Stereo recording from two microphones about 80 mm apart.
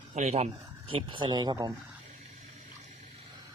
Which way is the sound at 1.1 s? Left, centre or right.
Right.